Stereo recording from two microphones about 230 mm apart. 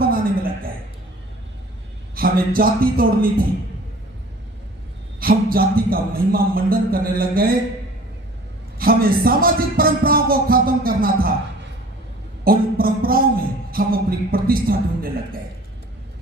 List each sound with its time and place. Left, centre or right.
0.0 s a sound: right
2.1 s speech: right
5.2 s speech: right
8.8 s speech: right
12.5 s a sound: right
13.7 s speech: right